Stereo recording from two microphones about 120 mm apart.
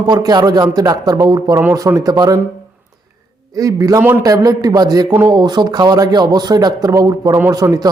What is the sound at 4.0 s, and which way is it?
Speech, 15° right (ahead or behind).